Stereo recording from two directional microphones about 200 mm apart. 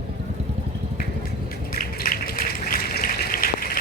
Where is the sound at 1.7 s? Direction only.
45° left (ahead or behind).